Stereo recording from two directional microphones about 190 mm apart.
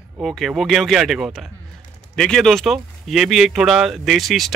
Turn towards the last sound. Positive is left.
turn(degrees=0)  # may be behind; listen again after turning